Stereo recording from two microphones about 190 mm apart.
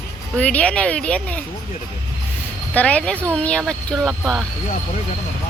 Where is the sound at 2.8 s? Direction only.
5° left (ahead or behind).